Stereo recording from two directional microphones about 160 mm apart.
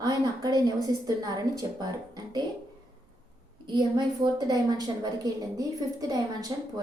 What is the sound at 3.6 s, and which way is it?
A woman's voice, 25° right (ahead or behind).